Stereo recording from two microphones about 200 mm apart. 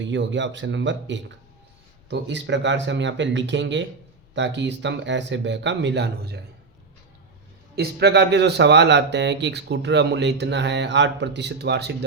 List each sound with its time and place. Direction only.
0.0 s a man's voice: 65° right (ahead or behind)
7.8 s a man's voice: 55° right (ahead or behind)